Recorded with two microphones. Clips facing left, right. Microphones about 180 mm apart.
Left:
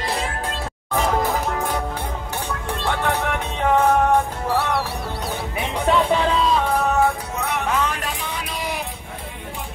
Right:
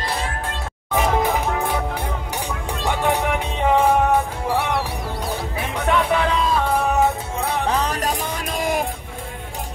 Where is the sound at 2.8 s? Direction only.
15° right (ahead or behind).